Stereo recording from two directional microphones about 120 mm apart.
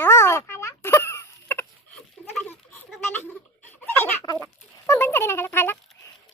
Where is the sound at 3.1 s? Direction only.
15° left (ahead or behind).